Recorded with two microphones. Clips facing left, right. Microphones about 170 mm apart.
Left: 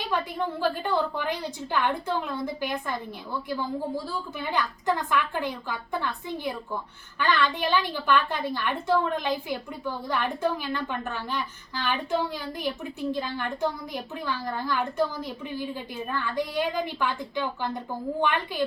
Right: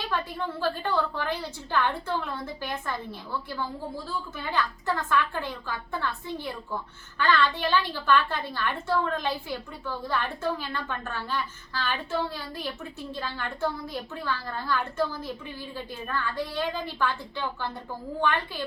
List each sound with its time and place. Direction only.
0.1 s a woman's voice: 15° left (ahead or behind)
3.9 s a woman's voice: 15° left (ahead or behind)